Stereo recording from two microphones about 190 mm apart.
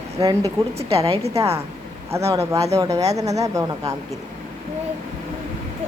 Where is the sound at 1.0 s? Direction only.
30° right (ahead or behind).